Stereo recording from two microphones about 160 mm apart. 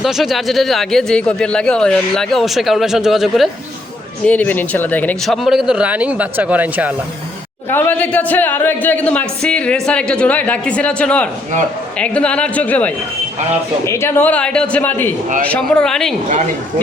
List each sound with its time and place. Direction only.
0.0 s speech: centre (ahead or behind)
4.3 s speech: 10° left (ahead or behind); by 6.9 s 10° right (ahead or behind)
7.7 s a man's voice: 10° left (ahead or behind)